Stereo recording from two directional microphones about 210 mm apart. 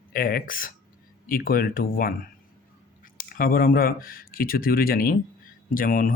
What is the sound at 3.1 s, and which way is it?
Speech, 45° left (ahead or behind).